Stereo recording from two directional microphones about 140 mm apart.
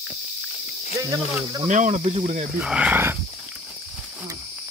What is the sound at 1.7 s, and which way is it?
Speech, 60° right (ahead or behind).